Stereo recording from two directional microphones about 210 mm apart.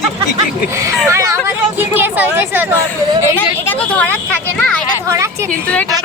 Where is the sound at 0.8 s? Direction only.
15° right (ahead or behind).